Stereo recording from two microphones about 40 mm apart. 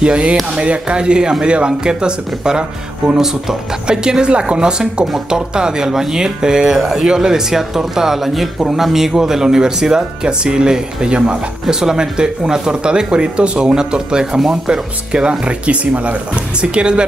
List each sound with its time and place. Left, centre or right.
0.0 s speech: right
11.6 s speech: centre